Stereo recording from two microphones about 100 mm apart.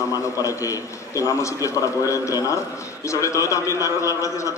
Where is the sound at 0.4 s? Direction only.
35° left (ahead or behind).